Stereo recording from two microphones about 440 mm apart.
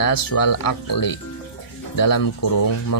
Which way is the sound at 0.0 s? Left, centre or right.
Left.